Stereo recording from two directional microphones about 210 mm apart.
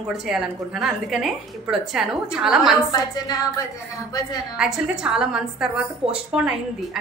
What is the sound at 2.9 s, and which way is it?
Speech, 20° left (ahead or behind).